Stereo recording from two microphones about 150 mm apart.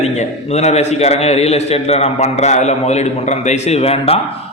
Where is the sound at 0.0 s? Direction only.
45° left (ahead or behind).